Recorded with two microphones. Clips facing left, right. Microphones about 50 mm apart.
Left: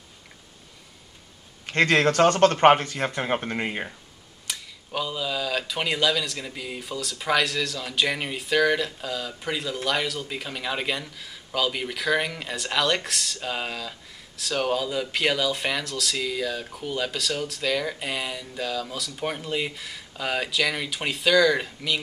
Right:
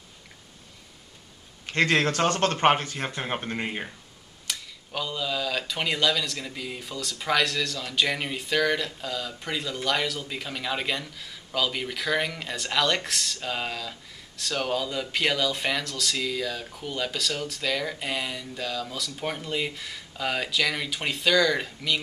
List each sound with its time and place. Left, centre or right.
1.7 s speech: left; by 3.9 s centre
4.5 s speech: centre